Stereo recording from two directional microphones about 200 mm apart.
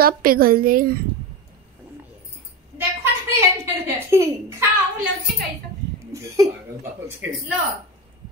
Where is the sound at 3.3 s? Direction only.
15° right (ahead or behind).